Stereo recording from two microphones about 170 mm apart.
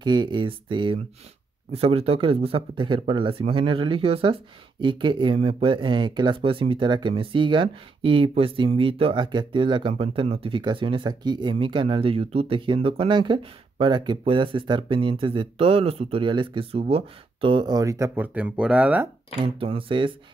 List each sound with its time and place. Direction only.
0.0 s speech: 25° right (ahead or behind); by 19.0 s 10° right (ahead or behind)
19.4 s speech: 30° right (ahead or behind)